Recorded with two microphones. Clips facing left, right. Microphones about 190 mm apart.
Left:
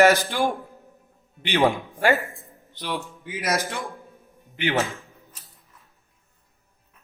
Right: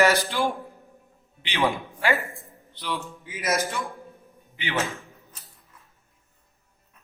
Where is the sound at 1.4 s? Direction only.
55° left (ahead or behind).